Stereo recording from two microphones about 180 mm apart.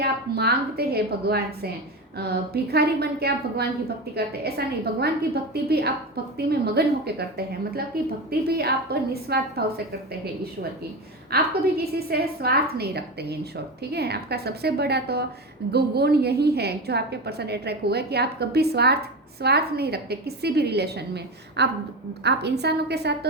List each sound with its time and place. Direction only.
0.0 s a woman's voice: 60° right (ahead or behind)
11.3 s a woman's voice: 60° right (ahead or behind)